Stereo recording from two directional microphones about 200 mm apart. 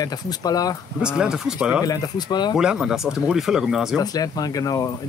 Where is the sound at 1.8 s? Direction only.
20° left (ahead or behind).